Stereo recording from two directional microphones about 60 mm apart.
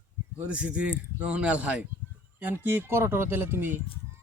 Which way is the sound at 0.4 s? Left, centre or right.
Right.